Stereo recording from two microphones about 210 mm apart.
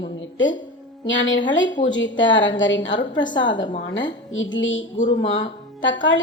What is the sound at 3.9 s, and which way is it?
A woman's voice, 65° left (ahead or behind).